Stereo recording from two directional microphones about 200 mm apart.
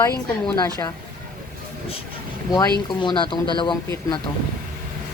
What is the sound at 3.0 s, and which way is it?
Speech, 25° left (ahead or behind).